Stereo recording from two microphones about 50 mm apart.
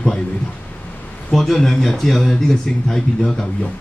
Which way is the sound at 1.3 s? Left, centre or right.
Centre.